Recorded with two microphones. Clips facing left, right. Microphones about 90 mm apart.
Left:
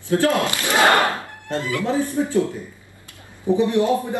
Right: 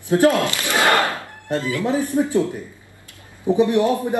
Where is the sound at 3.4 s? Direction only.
20° right (ahead or behind).